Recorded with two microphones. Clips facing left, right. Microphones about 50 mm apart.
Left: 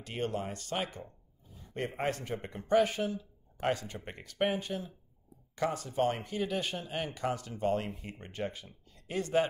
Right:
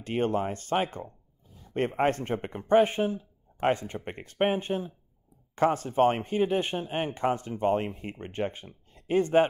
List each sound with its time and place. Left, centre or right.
0.0 s speech: right